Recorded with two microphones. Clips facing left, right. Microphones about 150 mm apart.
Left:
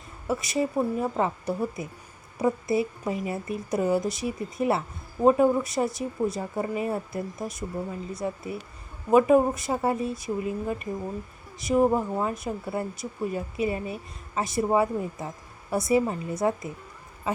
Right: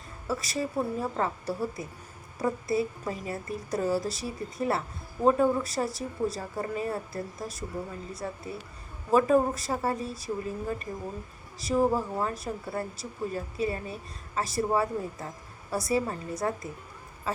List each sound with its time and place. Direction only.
0.3 s speech: 20° left (ahead or behind)